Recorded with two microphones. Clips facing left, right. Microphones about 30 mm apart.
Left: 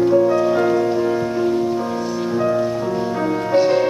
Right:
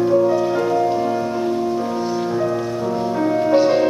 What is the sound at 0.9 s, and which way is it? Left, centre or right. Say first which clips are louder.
Music: left 1 dB; centre.